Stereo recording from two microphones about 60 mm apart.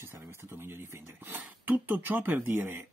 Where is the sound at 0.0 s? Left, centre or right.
Right.